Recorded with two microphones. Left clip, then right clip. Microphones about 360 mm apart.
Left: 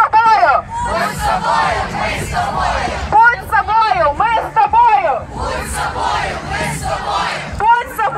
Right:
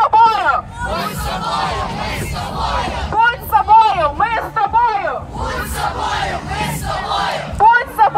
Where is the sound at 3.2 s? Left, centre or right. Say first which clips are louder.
Left 1 dB; centre.